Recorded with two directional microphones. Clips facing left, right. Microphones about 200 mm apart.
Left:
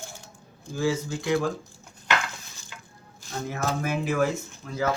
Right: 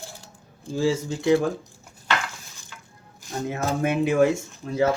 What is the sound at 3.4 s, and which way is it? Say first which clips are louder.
Speech: right 4 dB; 25° right (ahead or behind).